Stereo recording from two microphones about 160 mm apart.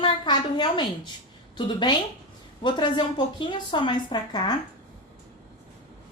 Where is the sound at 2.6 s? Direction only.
30° left (ahead or behind).